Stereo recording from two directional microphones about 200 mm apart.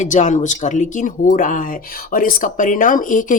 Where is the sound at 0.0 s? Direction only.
35° left (ahead or behind).